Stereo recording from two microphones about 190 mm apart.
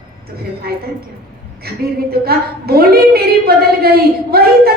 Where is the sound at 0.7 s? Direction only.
55° right (ahead or behind).